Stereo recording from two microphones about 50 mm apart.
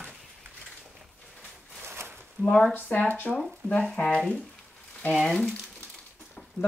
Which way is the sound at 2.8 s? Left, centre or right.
Left.